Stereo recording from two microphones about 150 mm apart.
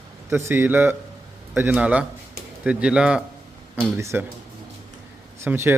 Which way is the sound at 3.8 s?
15° right (ahead or behind).